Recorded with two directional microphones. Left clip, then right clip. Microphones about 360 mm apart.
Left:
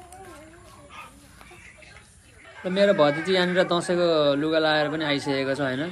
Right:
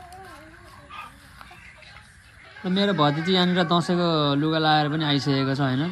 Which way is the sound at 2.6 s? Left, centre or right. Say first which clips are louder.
Left 3 dB; centre.